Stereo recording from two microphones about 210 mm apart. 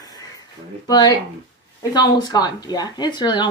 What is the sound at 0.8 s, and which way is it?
Speech, 20° left (ahead or behind).